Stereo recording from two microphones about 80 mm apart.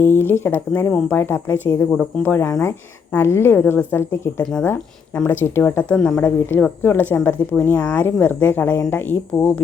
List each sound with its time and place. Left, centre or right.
0.0 s a woman's voice: left
6.2 s a woman's voice: left
7.8 s a woman's voice: left